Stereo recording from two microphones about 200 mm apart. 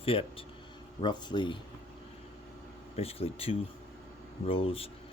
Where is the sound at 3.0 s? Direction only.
30° left (ahead or behind).